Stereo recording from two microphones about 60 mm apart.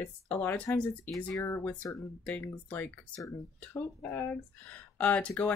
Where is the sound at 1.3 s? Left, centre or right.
Left.